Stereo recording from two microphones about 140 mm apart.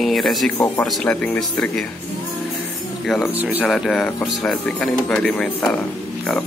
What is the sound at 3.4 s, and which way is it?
Speech, 10° right (ahead or behind).